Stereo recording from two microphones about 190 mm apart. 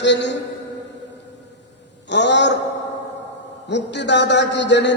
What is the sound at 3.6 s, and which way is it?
A man's voice, 65° left (ahead or behind).